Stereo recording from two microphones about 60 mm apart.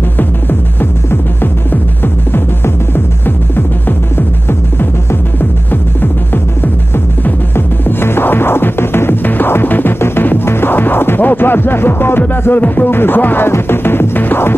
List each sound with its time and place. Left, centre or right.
1.1 s music: left
5.9 s music: left